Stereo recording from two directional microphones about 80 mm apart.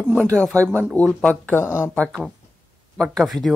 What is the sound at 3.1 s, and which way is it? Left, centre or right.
Speech, centre.